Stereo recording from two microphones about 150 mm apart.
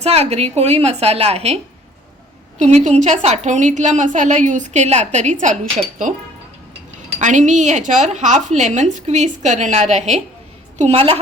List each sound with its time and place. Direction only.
0.0 s a woman's voice: 45° right (ahead or behind)
2.6 s a woman's voice: 50° right (ahead or behind)
7.2 s a woman's voice: 55° right (ahead or behind)